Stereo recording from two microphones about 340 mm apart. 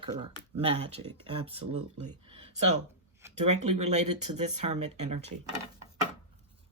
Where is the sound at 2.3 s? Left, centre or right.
Centre.